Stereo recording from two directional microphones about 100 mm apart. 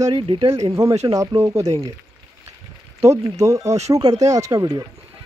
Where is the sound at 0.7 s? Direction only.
30° right (ahead or behind).